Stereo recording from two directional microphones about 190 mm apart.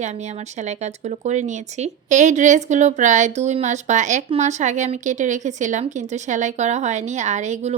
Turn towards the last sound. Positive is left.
turn(degrees=-35)  # may be behind; listen again after turning